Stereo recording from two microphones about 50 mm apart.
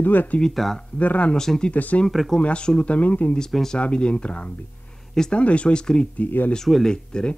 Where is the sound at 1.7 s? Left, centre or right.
Left.